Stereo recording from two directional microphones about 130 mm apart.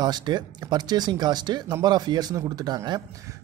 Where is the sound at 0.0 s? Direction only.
35° right (ahead or behind).